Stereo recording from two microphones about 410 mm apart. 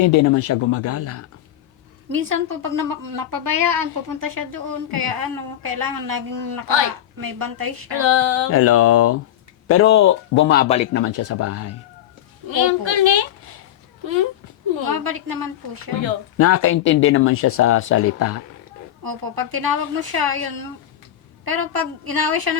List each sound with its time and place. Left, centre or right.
0.0 s speech: left
2.5 s speech: right
6.7 s a woman's voice: right
7.2 s a woman's voice: right
8.4 s speech: left; by 11.0 s centre
11.0 s speech: left
12.5 s a woman's voice: right
14.7 s a woman's voice: right
16.4 s speech: left
19.0 s a woman's voice: right